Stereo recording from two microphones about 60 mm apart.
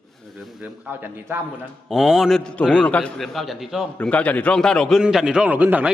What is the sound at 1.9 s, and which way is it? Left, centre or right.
Speech, centre.